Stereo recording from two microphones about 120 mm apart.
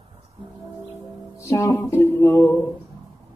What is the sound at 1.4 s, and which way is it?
Music, 25° left (ahead or behind).